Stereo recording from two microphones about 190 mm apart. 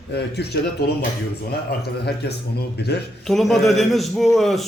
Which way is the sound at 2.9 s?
60° left (ahead or behind).